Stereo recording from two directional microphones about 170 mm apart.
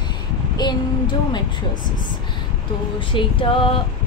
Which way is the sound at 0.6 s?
25° left (ahead or behind).